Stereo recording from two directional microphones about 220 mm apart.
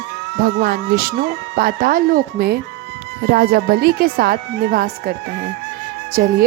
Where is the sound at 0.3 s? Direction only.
45° right (ahead or behind).